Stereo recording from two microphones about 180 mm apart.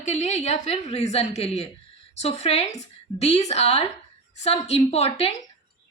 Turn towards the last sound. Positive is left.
turn(degrees=35)  # may be behind; listen again after turning